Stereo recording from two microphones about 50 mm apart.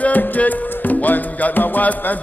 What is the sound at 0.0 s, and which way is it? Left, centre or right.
Music, left.